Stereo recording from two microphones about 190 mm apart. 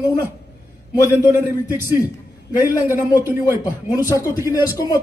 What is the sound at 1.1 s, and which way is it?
Speech, 15° right (ahead or behind).